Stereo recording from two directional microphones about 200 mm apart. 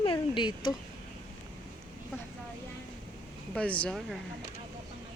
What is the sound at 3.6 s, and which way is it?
Speech, 5° left (ahead or behind).